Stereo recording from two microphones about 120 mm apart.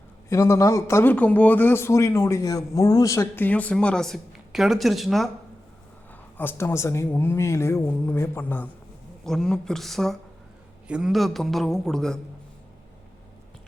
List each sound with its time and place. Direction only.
0.3 s speech: 25° left (ahead or behind)
3.4 s speech: 10° left (ahead or behind)
6.3 s speech: 15° left (ahead or behind)
9.2 s speech: 5° left (ahead or behind)